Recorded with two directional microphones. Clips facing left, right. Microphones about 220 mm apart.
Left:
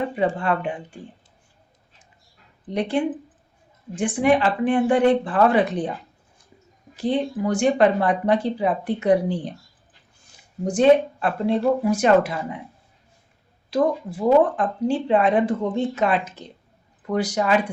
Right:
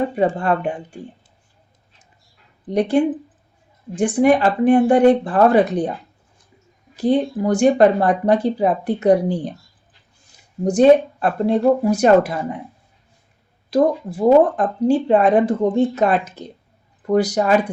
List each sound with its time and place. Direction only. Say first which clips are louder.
0.2 s speech: right 2 dB; 40° right (ahead or behind)
2.6 s speech: right 6 dB; 40° right (ahead or behind)
6.9 s speech: right 5 dB; 40° right (ahead or behind)
10.6 s speech: right 4 dB; 40° right (ahead or behind)
13.7 s speech: right 4 dB; 40° right (ahead or behind)